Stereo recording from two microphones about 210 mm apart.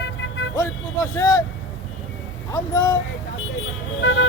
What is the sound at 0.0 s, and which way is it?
Music, 55° left (ahead or behind).